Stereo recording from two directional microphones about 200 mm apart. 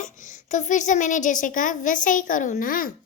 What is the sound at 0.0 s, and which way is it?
A woman's voice, 40° left (ahead or behind).